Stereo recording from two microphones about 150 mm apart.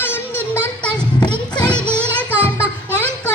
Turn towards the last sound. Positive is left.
turn(degrees=-15)  # may be behind; listen again after turning